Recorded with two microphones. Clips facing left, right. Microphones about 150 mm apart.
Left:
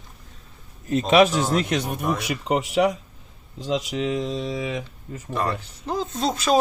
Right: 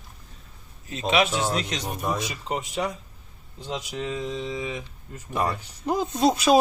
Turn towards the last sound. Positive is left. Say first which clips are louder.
# right 2 dB
turn(degrees=-10)  # may be behind; listen again after turning